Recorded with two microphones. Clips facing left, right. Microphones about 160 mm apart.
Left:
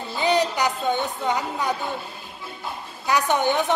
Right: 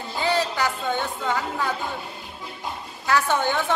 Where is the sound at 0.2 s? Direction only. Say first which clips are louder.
Left 2 dB; 20° left (ahead or behind).